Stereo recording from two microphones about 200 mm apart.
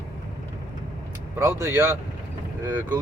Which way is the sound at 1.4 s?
15° right (ahead or behind).